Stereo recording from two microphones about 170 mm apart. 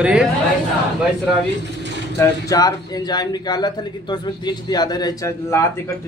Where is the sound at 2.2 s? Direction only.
20° left (ahead or behind).